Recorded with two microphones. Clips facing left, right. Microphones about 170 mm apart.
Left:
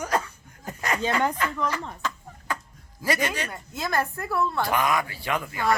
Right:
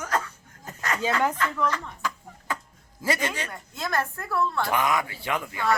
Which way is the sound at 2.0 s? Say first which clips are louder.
Right 1 dB; 10° right (ahead or behind).